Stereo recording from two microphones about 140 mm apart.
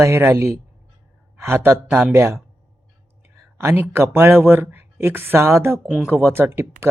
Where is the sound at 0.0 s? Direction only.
20° right (ahead or behind).